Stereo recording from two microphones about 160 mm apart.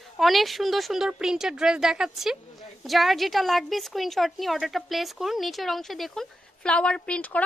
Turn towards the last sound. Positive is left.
turn(degrees=10)  # may be behind; listen again after turning